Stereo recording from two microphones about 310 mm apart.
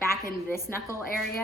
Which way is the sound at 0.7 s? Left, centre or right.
Centre.